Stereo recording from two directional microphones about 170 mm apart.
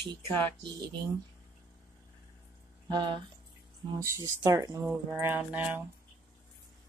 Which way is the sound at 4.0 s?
15° right (ahead or behind).